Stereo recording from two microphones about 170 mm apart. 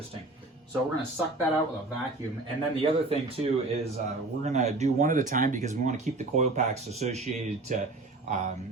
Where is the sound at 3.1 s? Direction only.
35° right (ahead or behind).